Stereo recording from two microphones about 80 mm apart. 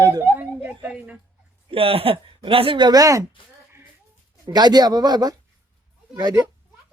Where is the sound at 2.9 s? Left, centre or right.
Right.